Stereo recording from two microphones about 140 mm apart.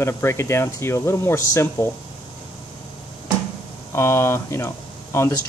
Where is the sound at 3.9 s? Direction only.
20° left (ahead or behind).